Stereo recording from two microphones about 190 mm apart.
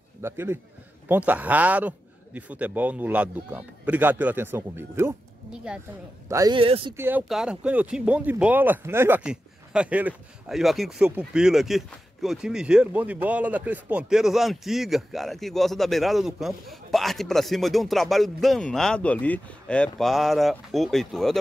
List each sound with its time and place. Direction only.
0.2 s speech: 10° right (ahead or behind); by 6.9 s 30° right (ahead or behind)
7.0 s speech: 10° right (ahead or behind)